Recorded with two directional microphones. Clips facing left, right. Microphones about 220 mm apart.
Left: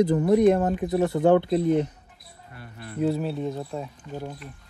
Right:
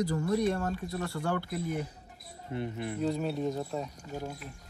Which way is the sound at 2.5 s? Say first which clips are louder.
Right 8 dB; 20° right (ahead or behind).